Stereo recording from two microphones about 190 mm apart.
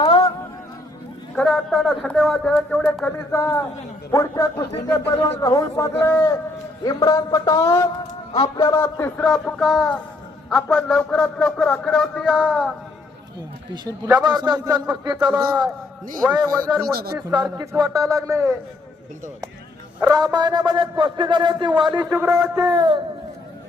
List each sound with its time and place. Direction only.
0.0 s a sound: 25° left (ahead or behind)
1.4 s a man's voice: 5° left (ahead or behind)
13.8 s a man's voice: 20° right (ahead or behind)
16.9 s speech: 55° right (ahead or behind)
17.2 s a man's voice: 20° right (ahead or behind)
20.1 s a man's voice: 20° right (ahead or behind)